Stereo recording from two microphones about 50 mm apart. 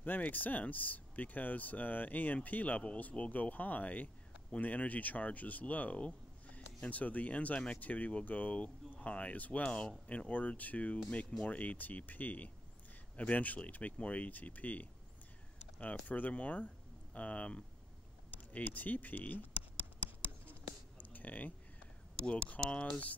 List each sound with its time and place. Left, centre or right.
0.0 s speech: left
21.0 s a sound: left
22.6 s speech: centre